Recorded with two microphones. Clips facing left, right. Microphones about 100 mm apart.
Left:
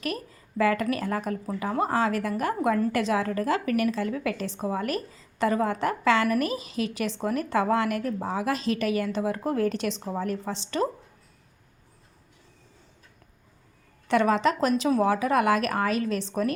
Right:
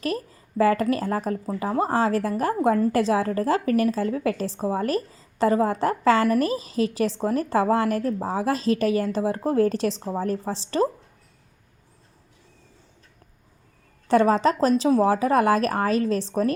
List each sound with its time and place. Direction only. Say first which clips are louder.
0.0 s a woman's voice: right 4 dB; 35° right (ahead or behind)
14.1 s a woman's voice: right 4 dB; 35° right (ahead or behind)